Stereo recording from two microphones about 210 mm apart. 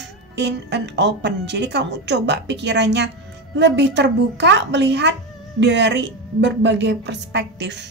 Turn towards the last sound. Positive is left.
turn(degrees=-55)  # may be behind; listen again after turning